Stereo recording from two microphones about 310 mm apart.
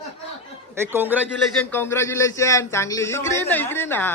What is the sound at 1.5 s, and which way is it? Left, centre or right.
A man's voice, centre.